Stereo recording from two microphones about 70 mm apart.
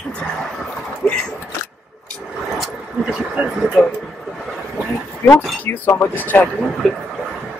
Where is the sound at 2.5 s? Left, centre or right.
Centre.